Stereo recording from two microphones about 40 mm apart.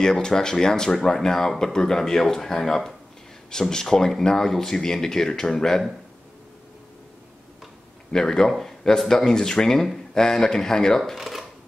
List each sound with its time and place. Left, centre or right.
0.0 s speech: centre
8.1 s speech: centre
11.0 s speech: centre